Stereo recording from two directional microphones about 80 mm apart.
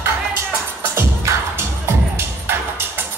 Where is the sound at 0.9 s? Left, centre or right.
Right.